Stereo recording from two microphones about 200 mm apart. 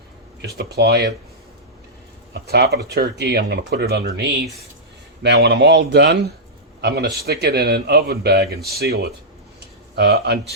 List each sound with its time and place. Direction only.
0.4 s speech: 55° right (ahead or behind)
2.3 s a man's voice: 55° right (ahead or behind)